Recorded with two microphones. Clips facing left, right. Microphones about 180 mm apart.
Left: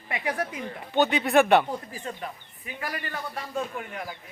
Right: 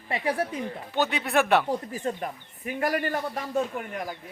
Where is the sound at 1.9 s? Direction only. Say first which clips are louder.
Right 5 dB; 45° right (ahead or behind).